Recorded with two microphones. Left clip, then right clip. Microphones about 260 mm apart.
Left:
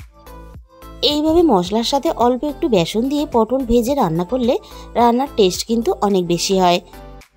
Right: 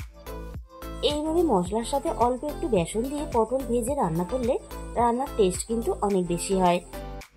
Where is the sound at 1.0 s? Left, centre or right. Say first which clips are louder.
Left 10 dB; left.